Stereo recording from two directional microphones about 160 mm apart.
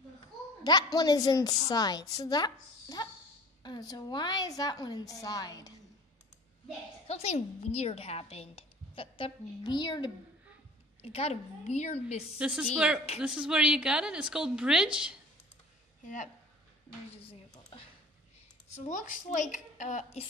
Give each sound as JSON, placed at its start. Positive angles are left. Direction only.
{"t": 0.9, "sound": "a woman's voice", "side_deg": 25}
{"t": 7.1, "sound": "a woman's voice", "side_deg": 40}
{"t": 11.0, "sound": "a woman's voice", "side_deg": 40}
{"t": 12.4, "sound": "a woman's voice", "side_deg": -5}
{"t": 17.1, "sound": "speech", "side_deg": 35}
{"t": 18.9, "sound": "a woman's voice", "side_deg": 50}